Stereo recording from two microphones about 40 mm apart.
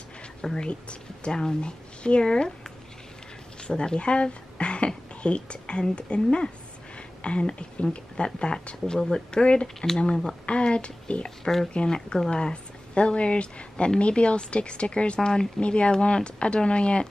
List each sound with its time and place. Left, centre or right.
0.4 s speech: centre
3.6 s speech: left
11.2 s speech: centre
11.7 s speech: left